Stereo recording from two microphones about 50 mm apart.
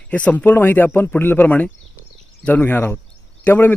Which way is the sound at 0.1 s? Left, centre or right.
Left.